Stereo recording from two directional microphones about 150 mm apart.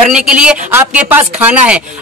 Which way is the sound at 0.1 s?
5° right (ahead or behind).